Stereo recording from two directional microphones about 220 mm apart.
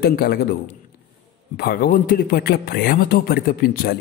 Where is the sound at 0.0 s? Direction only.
45° left (ahead or behind).